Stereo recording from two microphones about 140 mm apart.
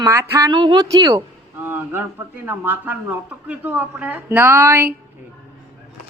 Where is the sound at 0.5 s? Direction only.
35° right (ahead or behind).